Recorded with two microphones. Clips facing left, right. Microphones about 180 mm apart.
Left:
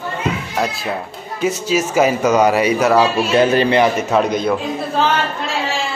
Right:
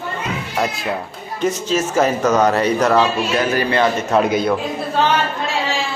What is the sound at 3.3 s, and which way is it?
Speech, 25° left (ahead or behind).